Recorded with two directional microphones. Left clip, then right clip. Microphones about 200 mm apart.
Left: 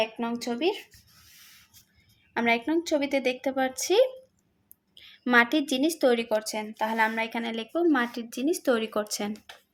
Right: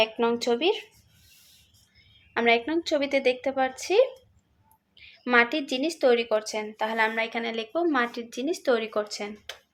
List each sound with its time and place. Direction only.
0.0 s speech: centre (ahead or behind)
2.3 s a woman's voice: 15° left (ahead or behind); by 9.3 s 30° left (ahead or behind)